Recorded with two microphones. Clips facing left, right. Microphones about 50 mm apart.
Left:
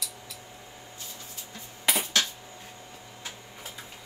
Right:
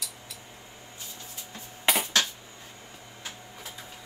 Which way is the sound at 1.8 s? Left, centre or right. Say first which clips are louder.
Right 2 dB; right.